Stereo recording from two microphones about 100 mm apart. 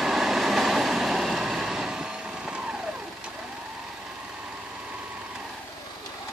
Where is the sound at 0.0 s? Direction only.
Centre (ahead or behind).